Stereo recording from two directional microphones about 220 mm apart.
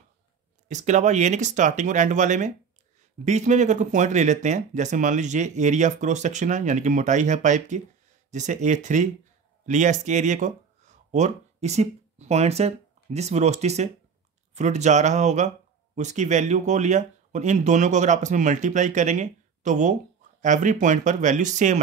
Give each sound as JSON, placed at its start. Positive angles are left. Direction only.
{"t": 0.7, "sound": "speech", "side_deg": -30}